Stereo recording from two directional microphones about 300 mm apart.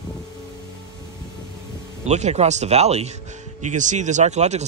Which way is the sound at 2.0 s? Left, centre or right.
Right.